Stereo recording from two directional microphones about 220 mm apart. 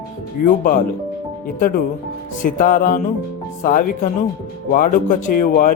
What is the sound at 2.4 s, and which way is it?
Speech, 35° left (ahead or behind).